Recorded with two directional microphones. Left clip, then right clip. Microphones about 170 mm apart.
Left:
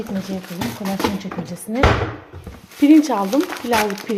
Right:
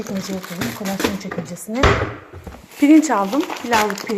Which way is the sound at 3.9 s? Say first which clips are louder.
Even; 25° left (ahead or behind).